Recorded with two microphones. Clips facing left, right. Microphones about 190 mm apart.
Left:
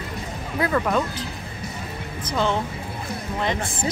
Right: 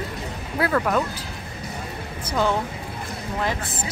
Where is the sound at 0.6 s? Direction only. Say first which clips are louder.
Even; centre (ahead or behind).